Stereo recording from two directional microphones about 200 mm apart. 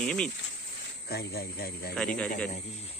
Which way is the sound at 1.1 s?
55° left (ahead or behind).